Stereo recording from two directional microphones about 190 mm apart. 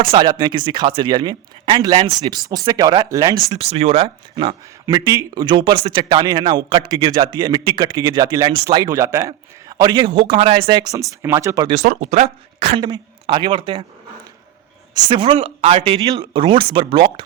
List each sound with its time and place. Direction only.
0.0 s speech: 25° right (ahead or behind)
3.6 s speech: 30° right (ahead or behind); by 11.7 s 15° right (ahead or behind)
11.7 s speech: 40° right (ahead or behind)
14.9 s speech: 25° right (ahead or behind)